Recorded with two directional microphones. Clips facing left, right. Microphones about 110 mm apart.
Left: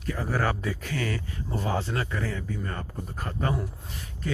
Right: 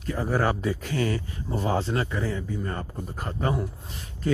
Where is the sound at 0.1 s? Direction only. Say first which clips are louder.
Right 3 dB; 25° right (ahead or behind).